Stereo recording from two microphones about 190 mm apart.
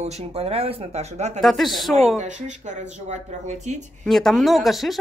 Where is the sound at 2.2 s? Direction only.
40° right (ahead or behind).